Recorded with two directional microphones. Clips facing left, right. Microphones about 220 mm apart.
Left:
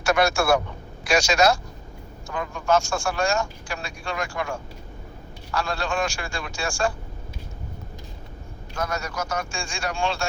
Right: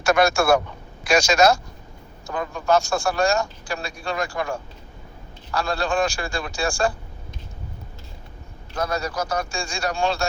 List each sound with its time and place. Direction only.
0.0 s a man's voice: 45° right (ahead or behind)
8.7 s a man's voice: 30° right (ahead or behind)